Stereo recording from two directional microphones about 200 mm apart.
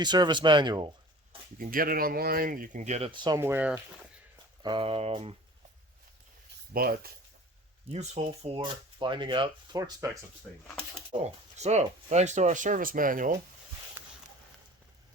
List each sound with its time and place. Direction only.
0.0 s speech: 20° right (ahead or behind)
1.5 s speech: 45° right (ahead or behind); by 3.8 s 10° right (ahead or behind)
4.6 s speech: 25° right (ahead or behind)
6.7 s speech: 50° right (ahead or behind)
7.9 s speech: 30° right (ahead or behind)
11.1 s speech: 35° right (ahead or behind)